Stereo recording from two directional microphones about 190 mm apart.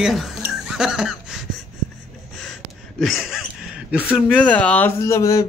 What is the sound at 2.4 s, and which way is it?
Gasp, centre (ahead or behind).